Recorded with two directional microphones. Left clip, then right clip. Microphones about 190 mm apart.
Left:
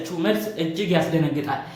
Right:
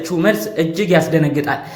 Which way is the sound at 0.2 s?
40° right (ahead or behind).